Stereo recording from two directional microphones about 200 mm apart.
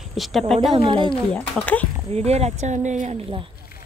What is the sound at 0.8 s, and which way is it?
Speech, 25° right (ahead or behind).